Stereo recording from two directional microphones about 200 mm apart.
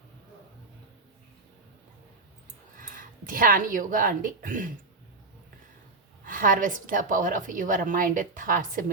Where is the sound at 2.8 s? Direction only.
45° right (ahead or behind).